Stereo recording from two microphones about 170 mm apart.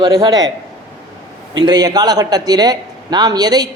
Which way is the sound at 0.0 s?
20° right (ahead or behind).